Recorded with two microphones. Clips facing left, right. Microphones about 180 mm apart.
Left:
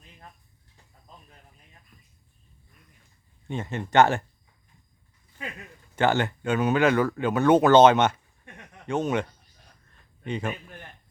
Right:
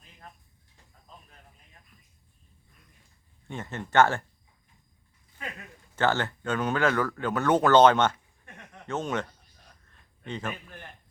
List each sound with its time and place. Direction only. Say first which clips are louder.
3.5 s speech: left 3 dB; 15° left (ahead or behind)
6.0 s speech: left 3 dB; 15° left (ahead or behind)
7.6 s speech: left 2 dB; 10° left (ahead or behind)
8.9 s speech: left 5 dB; 15° left (ahead or behind)
10.2 s speech: left 4 dB; 15° left (ahead or behind)